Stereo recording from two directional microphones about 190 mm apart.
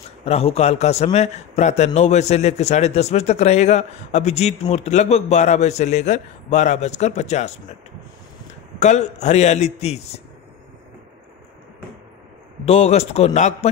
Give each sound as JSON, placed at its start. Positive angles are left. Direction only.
{"t": 0.2, "sound": "a man's voice", "side_deg": 35}
{"t": 8.7, "sound": "a man's voice", "side_deg": 35}
{"t": 12.6, "sound": "a man's voice", "side_deg": 35}